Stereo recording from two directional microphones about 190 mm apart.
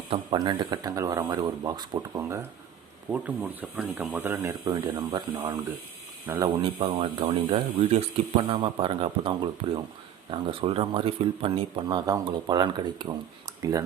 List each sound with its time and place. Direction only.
0.1 s speech: 25° right (ahead or behind)
6.6 s speech: 25° right (ahead or behind)